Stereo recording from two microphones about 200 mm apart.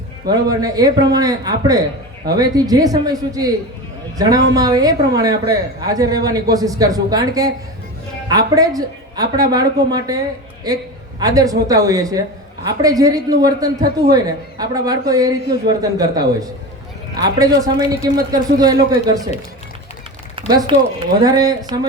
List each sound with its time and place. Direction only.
0.3 s a man's voice: 20° right (ahead or behind)
11.2 s a woman's voice: 20° right (ahead or behind)
20.5 s a man's voice: 20° right (ahead or behind)